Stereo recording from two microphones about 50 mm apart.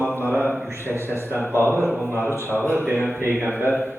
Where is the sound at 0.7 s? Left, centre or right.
Right.